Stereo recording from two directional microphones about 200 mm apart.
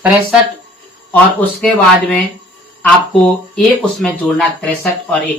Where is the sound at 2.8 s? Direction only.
Centre (ahead or behind).